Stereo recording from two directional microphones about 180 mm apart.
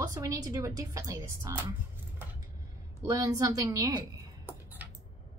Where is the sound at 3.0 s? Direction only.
20° right (ahead or behind).